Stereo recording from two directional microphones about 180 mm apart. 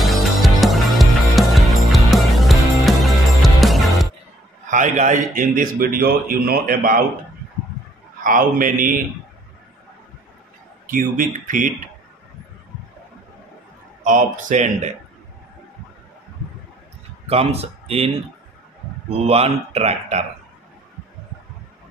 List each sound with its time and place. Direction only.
0.0 s music: centre (ahead or behind)
4.6 s a man's voice: 45° right (ahead or behind)
8.2 s a man's voice: 50° right (ahead or behind)
10.9 s a man's voice: 50° right (ahead or behind)
14.0 s a man's voice: 45° right (ahead or behind)
17.3 s speech: 35° right (ahead or behind)
19.1 s speech: 35° right (ahead or behind)